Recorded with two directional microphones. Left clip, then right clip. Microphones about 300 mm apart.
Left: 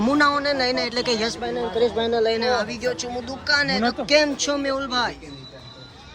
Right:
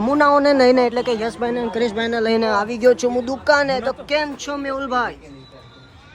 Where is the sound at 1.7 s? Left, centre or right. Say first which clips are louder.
Even; right.